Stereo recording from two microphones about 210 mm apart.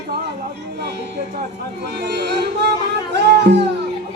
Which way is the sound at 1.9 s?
50° right (ahead or behind).